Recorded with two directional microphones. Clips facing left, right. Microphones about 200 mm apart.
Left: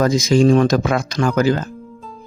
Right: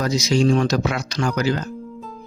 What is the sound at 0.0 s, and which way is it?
Speech, 50° left (ahead or behind).